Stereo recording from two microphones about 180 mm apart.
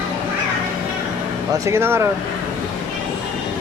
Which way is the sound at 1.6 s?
15° right (ahead or behind).